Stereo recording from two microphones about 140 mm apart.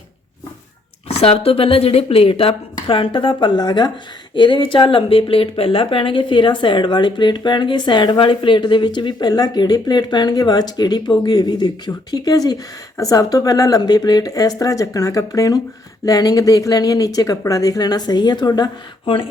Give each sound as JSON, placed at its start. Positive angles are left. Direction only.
{"t": 1.0, "sound": "speech", "side_deg": 45}